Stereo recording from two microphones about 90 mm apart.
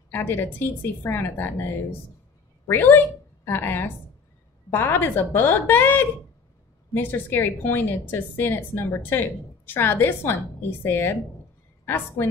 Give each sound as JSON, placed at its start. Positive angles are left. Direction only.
{"t": 0.1, "sound": "a woman's voice", "side_deg": 25}
{"t": 2.7, "sound": "a woman's voice", "side_deg": 25}